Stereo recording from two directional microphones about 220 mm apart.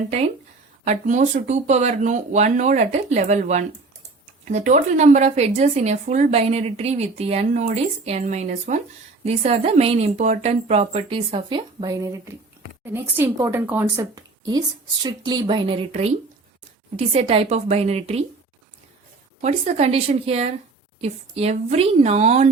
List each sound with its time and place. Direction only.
0.9 s a woman's voice: 35° right (ahead or behind)
19.4 s a woman's voice: 30° right (ahead or behind)